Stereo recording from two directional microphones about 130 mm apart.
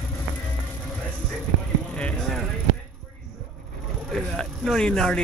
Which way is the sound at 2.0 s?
5° left (ahead or behind).